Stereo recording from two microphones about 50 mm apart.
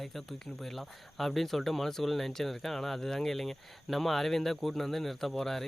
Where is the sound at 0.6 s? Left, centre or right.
Centre.